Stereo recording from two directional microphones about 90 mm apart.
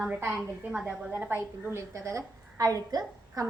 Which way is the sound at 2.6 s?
45° right (ahead or behind).